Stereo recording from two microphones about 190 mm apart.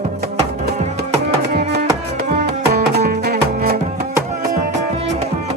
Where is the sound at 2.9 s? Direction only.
55° right (ahead or behind).